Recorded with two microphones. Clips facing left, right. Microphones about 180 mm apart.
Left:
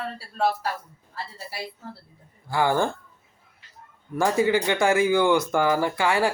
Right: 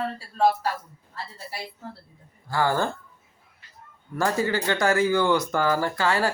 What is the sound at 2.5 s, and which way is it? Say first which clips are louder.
Speech: left 2 dB; 15° left (ahead or behind).